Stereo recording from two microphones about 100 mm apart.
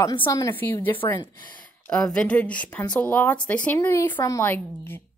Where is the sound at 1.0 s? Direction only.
40° left (ahead or behind).